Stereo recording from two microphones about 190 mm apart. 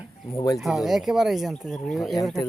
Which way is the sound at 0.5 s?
Centre (ahead or behind).